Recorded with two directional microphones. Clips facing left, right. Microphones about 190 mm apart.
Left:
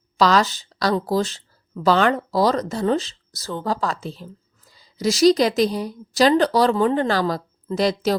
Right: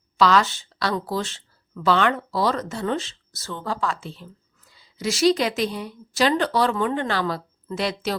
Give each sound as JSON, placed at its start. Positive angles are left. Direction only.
{"t": 0.2, "sound": "speech", "side_deg": 40}